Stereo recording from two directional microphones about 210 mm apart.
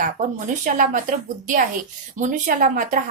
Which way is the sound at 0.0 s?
40° right (ahead or behind).